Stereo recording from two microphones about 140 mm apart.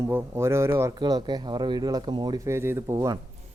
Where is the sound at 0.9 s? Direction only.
30° right (ahead or behind).